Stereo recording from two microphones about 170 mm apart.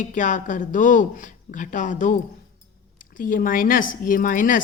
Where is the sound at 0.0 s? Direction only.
50° left (ahead or behind).